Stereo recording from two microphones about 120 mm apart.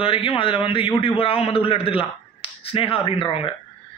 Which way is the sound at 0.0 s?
50° left (ahead or behind).